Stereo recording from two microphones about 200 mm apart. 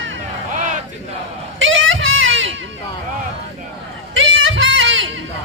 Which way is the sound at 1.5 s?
75° right (ahead or behind).